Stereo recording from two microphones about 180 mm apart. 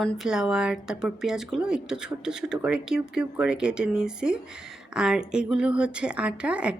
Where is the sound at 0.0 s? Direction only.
Centre (ahead or behind).